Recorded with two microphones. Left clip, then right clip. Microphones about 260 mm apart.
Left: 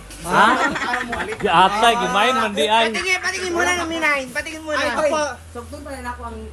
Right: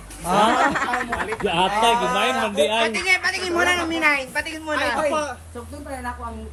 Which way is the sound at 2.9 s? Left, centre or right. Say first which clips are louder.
Right 1 dB; right.